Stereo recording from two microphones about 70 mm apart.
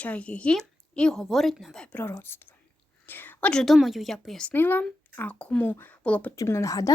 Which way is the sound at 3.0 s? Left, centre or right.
Left.